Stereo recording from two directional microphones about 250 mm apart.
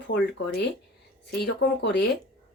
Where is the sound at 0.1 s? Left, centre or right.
Left.